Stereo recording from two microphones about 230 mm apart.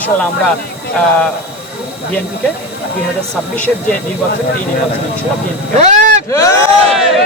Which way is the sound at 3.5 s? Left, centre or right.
Centre.